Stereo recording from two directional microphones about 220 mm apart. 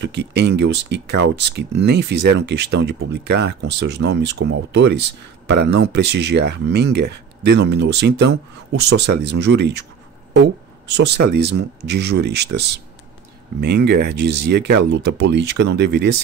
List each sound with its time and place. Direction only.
0.0 s speech: 50° right (ahead or behind)
10.9 s speech: 50° right (ahead or behind)